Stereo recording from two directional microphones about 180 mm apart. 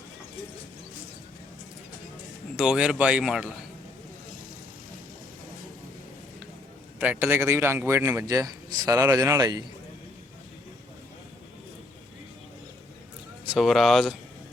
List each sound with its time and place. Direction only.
2.6 s speech: 5° right (ahead or behind)
7.0 s a man's voice: 10° right (ahead or behind)
13.4 s speech: centre (ahead or behind)